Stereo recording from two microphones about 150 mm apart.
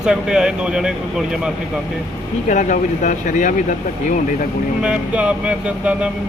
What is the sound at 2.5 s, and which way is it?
Speech, 55° left (ahead or behind).